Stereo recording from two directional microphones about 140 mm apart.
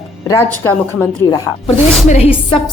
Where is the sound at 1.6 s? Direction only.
50° left (ahead or behind).